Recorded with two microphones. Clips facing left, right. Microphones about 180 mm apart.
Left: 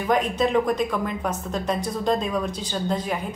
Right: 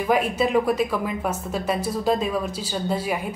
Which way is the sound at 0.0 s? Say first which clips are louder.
Right 1 dB; 5° right (ahead or behind).